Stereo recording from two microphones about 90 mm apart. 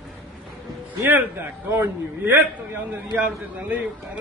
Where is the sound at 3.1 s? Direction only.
15° right (ahead or behind).